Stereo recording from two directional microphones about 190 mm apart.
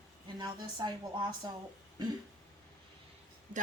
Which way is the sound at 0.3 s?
20° right (ahead or behind).